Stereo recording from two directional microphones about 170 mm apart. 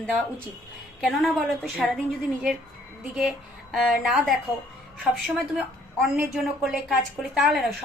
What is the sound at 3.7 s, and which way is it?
Speech, centre (ahead or behind).